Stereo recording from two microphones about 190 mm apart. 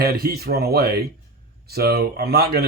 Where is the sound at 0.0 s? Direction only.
55° right (ahead or behind).